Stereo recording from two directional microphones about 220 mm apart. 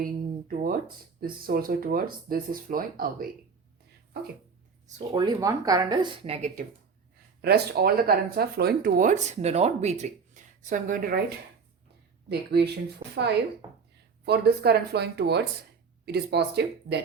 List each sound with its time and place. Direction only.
0.0 s a sound: 40° right (ahead or behind)
1.2 s speech: 40° right (ahead or behind)
4.9 s a woman's voice: 25° right (ahead or behind)
7.4 s speech: 45° right (ahead or behind)
12.3 s speech: 50° right (ahead or behind)
13.6 s a sound: 20° right (ahead or behind)
14.3 s speech: 45° right (ahead or behind)